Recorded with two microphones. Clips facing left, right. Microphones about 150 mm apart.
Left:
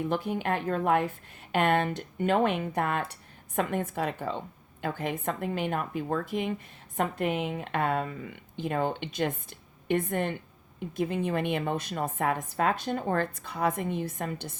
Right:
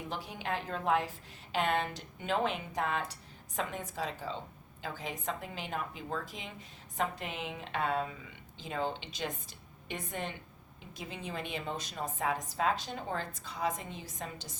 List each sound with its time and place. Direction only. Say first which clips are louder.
0.1 s speech: left 8 dB; 55° left (ahead or behind)